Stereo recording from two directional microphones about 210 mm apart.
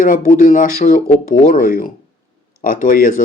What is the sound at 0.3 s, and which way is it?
Speech, 40° left (ahead or behind).